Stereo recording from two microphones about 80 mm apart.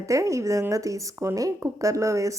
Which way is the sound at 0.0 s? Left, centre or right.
Right.